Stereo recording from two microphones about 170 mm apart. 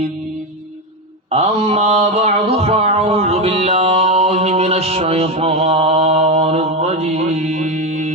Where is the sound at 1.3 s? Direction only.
40° right (ahead or behind).